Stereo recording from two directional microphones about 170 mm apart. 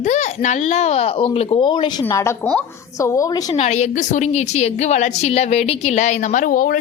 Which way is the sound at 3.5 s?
40° left (ahead or behind).